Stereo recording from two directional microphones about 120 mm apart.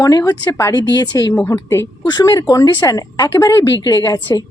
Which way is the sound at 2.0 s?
35° left (ahead or behind).